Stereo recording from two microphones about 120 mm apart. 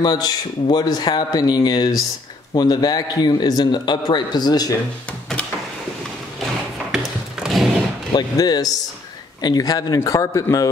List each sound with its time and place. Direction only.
0.0 s a man's voice: 35° left (ahead or behind)
6.4 s a sound: 5° right (ahead or behind)
8.1 s a man's voice: 35° left (ahead or behind)